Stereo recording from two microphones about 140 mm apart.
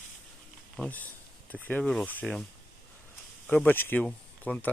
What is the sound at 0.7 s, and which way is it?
Speech, 10° left (ahead or behind).